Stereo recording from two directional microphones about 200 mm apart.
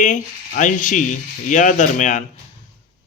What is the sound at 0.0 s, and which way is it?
Speech, 40° left (ahead or behind).